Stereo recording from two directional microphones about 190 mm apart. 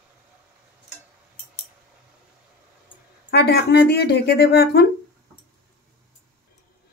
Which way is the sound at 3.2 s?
60° left (ahead or behind).